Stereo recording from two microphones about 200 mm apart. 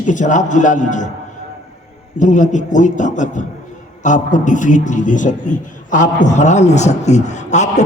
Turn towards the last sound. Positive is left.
turn(degrees=35)  # may be behind; listen again after turning